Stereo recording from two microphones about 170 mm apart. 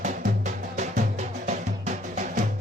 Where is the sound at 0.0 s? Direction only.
45° right (ahead or behind).